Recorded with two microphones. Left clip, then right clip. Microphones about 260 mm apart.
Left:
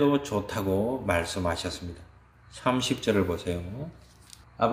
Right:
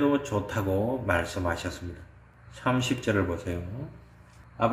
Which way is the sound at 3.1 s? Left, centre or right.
Left.